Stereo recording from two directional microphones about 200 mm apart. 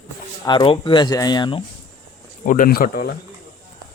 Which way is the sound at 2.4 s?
40° left (ahead or behind).